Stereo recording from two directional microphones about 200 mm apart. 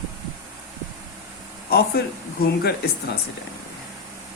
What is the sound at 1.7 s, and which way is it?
Speech, 50° left (ahead or behind).